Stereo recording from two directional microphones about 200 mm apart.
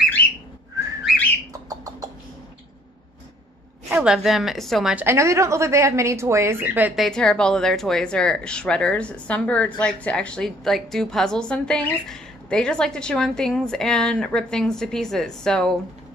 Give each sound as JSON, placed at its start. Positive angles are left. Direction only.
{"t": 3.9, "sound": "a woman's voice", "side_deg": -5}
{"t": 7.1, "sound": "a woman's voice", "side_deg": 5}